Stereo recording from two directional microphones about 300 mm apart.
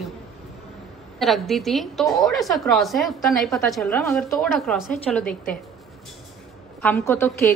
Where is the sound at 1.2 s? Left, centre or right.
Centre.